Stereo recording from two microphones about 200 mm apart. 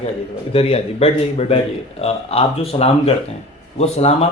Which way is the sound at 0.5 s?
30° left (ahead or behind).